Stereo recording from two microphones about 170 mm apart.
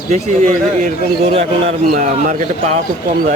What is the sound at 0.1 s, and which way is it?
A man's voice, 45° right (ahead or behind).